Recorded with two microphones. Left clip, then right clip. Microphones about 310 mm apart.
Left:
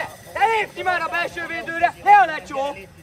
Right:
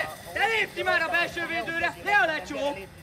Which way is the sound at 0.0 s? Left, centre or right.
Centre.